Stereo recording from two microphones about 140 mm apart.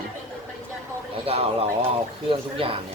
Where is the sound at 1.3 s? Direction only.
45° right (ahead or behind).